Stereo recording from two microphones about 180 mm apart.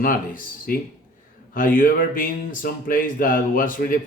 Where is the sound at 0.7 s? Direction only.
50° left (ahead or behind).